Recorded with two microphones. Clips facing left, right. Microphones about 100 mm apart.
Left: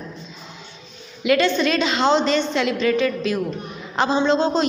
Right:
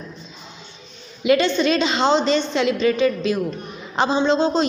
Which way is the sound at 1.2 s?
20° right (ahead or behind).